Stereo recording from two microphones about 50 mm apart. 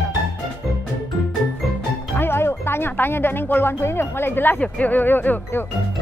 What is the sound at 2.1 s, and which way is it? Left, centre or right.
Music, left.